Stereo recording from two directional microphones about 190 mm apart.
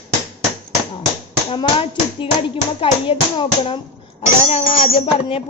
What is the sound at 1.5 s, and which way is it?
A woman's voice, 25° left (ahead or behind).